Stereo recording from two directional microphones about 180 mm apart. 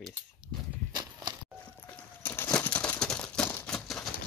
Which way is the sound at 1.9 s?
10° left (ahead or behind).